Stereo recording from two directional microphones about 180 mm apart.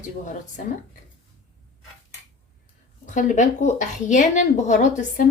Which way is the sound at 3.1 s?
45° left (ahead or behind).